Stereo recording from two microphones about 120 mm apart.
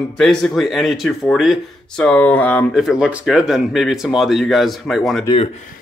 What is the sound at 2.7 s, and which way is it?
Speech, 5° right (ahead or behind).